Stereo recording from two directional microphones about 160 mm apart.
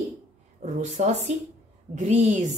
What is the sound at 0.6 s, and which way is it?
Speech, 45° right (ahead or behind).